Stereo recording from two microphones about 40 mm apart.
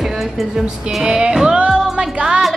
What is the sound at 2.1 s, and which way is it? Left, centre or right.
Speech, right.